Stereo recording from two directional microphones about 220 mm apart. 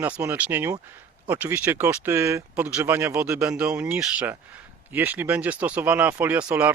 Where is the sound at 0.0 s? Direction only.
10° right (ahead or behind).